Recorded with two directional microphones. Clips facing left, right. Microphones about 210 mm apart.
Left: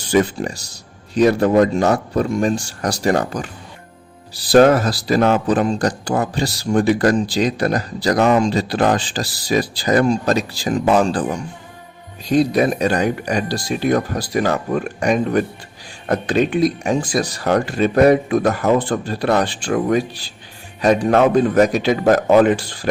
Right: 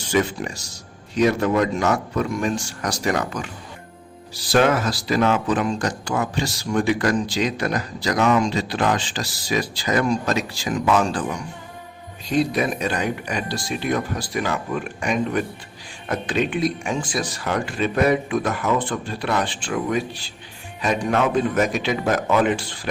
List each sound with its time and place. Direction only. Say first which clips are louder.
0.1 s speech: left 5 dB; 35° left (ahead or behind)
4.5 s speech: left 7 dB; 35° left (ahead or behind)